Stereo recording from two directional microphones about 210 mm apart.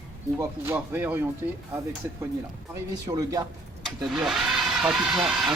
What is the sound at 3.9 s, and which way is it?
Speech, centre (ahead or behind).